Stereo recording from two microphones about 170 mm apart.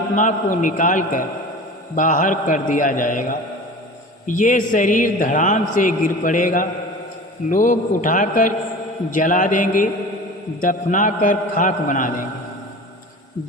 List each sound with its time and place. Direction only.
0.2 s a man's voice: 50° left (ahead or behind)